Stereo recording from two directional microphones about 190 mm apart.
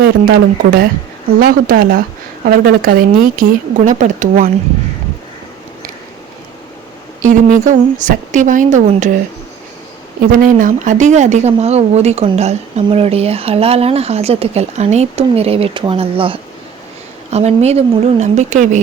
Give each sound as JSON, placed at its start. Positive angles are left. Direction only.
{"t": 0.0, "sound": "speech", "side_deg": -50}
{"t": 7.2, "sound": "speech", "side_deg": -40}
{"t": 10.3, "sound": "speech", "side_deg": -45}